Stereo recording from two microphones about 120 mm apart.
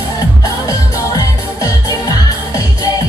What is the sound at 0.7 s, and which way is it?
Music, 30° left (ahead or behind).